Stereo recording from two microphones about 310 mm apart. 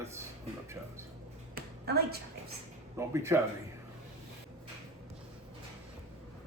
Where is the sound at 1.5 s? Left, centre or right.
Right.